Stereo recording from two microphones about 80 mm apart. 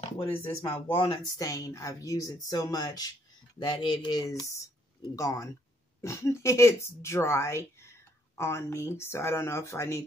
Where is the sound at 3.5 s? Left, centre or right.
Left.